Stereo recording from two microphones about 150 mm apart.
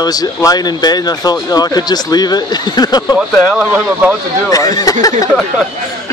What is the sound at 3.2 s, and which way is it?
Speech, 10° right (ahead or behind).